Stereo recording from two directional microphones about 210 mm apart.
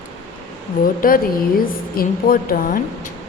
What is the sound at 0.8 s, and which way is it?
A woman's voice, 40° left (ahead or behind).